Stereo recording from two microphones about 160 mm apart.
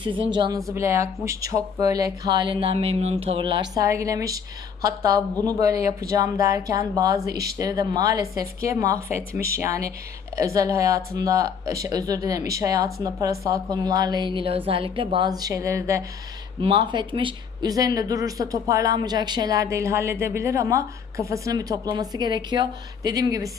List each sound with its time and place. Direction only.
0.0 s speech: 30° right (ahead or behind)
0.7 s speech: 15° right (ahead or behind)
16.6 s speech: 30° right (ahead or behind)